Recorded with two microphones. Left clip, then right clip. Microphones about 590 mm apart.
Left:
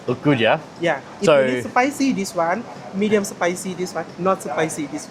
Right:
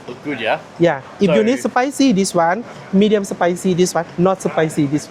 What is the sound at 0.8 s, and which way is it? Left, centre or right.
Speech, right.